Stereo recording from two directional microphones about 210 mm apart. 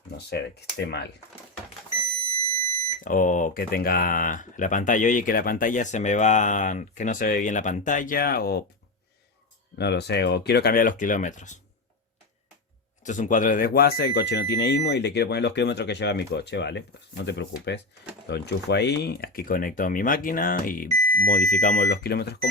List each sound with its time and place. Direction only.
0.3 s speech: 50° left (ahead or behind)
3.0 s speech: 40° left (ahead or behind)
9.7 s speech: 55° left (ahead or behind); by 11.6 s 35° left (ahead or behind)
13.0 s speech: 35° left (ahead or behind)
21.0 s alarm: 5° left (ahead or behind)
21.2 s speech: 40° left (ahead or behind)